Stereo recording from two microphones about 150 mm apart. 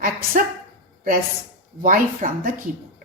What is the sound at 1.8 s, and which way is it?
Speech, 65° right (ahead or behind).